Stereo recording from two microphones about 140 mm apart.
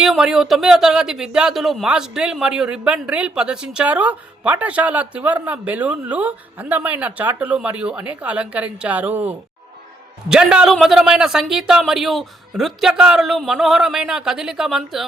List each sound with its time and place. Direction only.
0.0 s speech: 5° right (ahead or behind)